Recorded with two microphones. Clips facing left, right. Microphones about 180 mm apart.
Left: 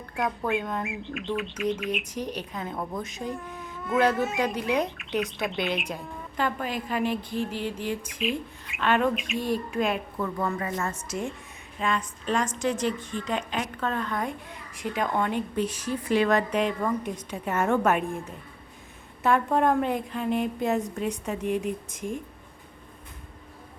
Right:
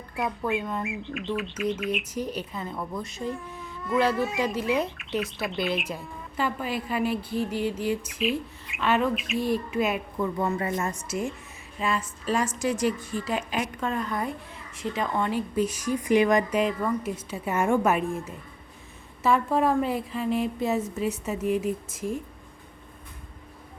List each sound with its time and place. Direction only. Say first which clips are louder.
0.2 s a woman's voice: even; centre (ahead or behind)
7.3 s a sound: right 3 dB; 45° right (ahead or behind)
7.9 s a woman's voice: right 3 dB; 5° right (ahead or behind)